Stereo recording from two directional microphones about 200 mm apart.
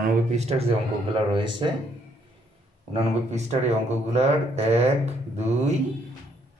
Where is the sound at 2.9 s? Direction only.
35° right (ahead or behind).